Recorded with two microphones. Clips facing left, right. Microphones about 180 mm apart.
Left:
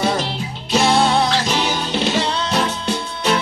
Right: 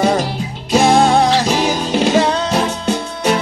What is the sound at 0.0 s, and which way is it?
Music, 45° right (ahead or behind).